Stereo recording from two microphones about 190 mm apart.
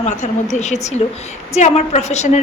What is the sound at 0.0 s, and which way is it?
A woman's voice, 40° left (ahead or behind).